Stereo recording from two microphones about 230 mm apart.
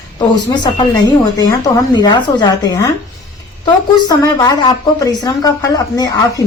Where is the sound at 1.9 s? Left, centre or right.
Centre.